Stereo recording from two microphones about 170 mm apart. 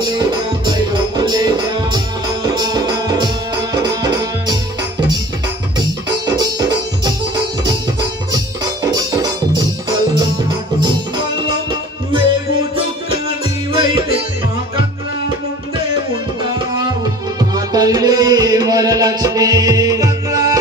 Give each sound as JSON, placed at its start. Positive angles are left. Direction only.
{"t": 0.0, "sound": "music", "side_deg": -25}
{"t": 5.8, "sound": "music", "side_deg": -25}
{"t": 8.9, "sound": "music", "side_deg": -25}
{"t": 10.8, "sound": "music", "side_deg": -25}
{"t": 13.7, "sound": "music", "side_deg": -30}
{"t": 17.4, "sound": "music", "side_deg": -25}